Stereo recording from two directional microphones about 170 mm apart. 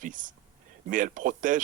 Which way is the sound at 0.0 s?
50° right (ahead or behind).